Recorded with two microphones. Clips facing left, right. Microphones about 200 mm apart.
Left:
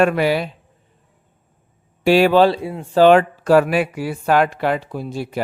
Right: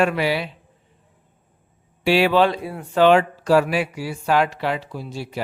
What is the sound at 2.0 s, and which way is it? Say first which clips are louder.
Speech: left 4 dB; 45° left (ahead or behind).